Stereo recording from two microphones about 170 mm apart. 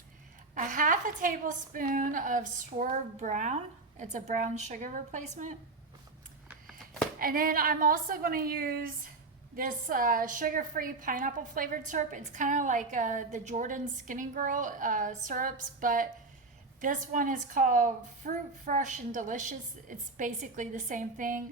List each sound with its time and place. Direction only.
0.5 s a woman's voice: 50° right (ahead or behind)
7.2 s a woman's voice: 55° right (ahead or behind)